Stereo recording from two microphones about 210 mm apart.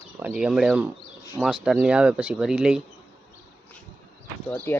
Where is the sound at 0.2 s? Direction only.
5° right (ahead or behind).